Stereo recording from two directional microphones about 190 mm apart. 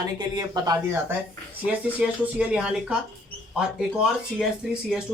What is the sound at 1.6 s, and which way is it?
Speech, 5° right (ahead or behind).